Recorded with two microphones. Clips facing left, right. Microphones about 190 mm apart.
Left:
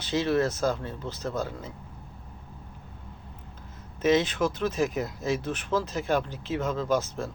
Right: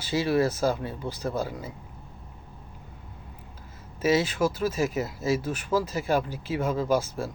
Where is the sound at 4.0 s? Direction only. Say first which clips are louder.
Even; 5° right (ahead or behind).